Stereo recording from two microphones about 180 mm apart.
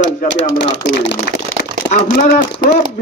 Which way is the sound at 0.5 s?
55° left (ahead or behind).